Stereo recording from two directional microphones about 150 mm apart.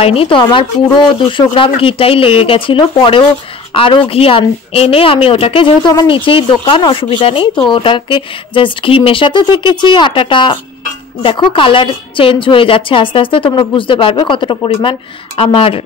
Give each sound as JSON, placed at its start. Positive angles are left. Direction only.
{"t": 0.0, "sound": "a woman's voice", "side_deg": 40}